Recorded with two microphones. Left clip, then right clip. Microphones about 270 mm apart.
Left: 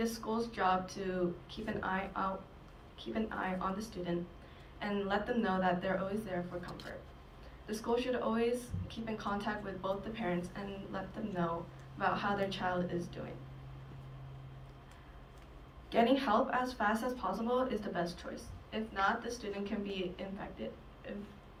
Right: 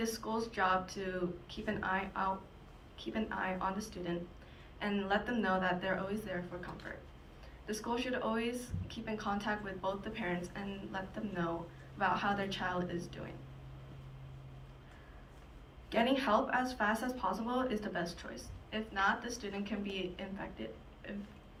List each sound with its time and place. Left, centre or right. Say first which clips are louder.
0.0 s a woman's voice: left 1 dB; centre
6.7 s speech: even; left
7.7 s a woman's voice: left 3 dB; centre
15.9 s a woman's voice: left 1 dB; centre